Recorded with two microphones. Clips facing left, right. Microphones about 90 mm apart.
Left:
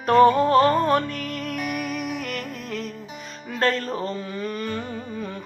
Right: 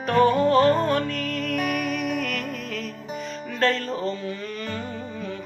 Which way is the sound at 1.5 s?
45° right (ahead or behind).